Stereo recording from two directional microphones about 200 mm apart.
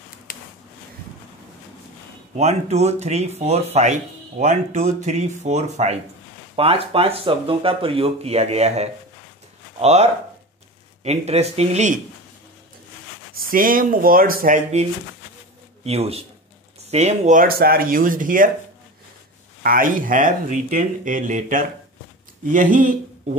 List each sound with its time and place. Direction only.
0.3 s a sound: 45° left (ahead or behind)
2.3 s speech: 35° right (ahead or behind)
11.1 s speech: 30° right (ahead or behind)
13.3 s speech: 45° right (ahead or behind)
19.6 s speech: 45° right (ahead or behind)